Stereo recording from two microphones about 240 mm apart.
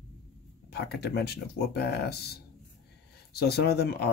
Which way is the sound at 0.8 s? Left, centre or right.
Left.